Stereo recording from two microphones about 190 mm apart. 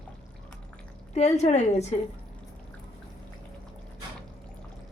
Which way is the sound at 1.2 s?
35° left (ahead or behind).